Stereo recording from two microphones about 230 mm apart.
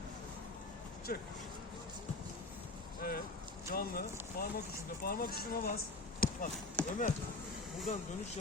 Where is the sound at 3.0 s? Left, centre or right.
Left.